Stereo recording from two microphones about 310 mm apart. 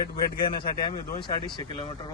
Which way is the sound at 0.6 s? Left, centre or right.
Centre.